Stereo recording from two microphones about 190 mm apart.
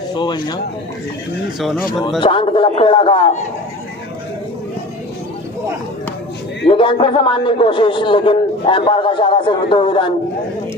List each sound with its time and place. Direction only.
0.1 s a man's voice: 25° left (ahead or behind)
1.5 s speech: centre (ahead or behind)
2.2 s a man's voice: 25° left (ahead or behind)
6.7 s a man's voice: 25° left (ahead or behind)